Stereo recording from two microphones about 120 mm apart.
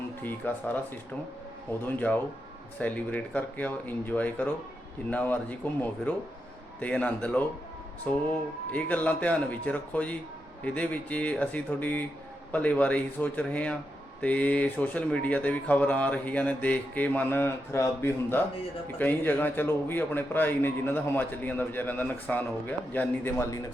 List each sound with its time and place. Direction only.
0.2 s a man's voice: 15° left (ahead or behind)
1.8 s a man's voice: 15° left (ahead or behind)